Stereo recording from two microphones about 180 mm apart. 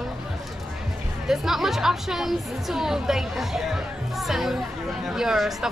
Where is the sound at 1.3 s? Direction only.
Centre (ahead or behind).